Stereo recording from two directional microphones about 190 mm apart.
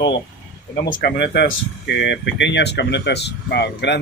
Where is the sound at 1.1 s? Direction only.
65° left (ahead or behind).